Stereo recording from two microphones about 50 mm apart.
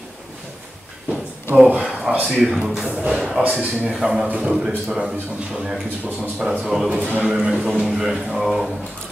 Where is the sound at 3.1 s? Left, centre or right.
Centre.